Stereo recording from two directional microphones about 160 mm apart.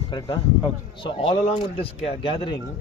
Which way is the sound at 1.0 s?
35° left (ahead or behind).